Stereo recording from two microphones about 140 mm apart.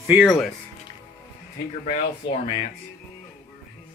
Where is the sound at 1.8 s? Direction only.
65° left (ahead or behind).